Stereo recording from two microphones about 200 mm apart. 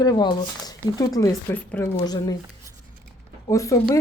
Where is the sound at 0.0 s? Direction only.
20° left (ahead or behind).